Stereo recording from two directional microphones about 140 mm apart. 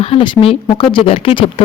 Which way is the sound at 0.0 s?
45° left (ahead or behind).